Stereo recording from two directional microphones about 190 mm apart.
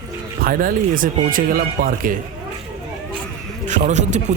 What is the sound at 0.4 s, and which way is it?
Speech, 50° right (ahead or behind).